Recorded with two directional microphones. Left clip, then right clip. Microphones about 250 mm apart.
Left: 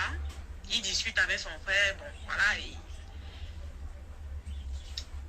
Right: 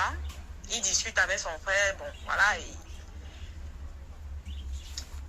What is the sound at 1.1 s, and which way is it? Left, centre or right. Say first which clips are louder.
Speech: right 2 dB; centre.